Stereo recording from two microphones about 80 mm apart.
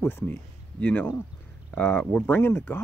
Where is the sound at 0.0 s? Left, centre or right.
Left.